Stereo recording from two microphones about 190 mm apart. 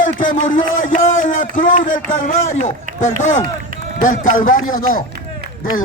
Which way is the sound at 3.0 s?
40° left (ahead or behind).